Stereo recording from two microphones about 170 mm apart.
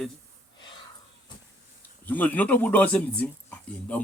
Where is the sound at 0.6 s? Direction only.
25° left (ahead or behind).